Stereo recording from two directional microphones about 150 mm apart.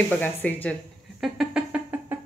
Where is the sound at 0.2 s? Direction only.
10° left (ahead or behind).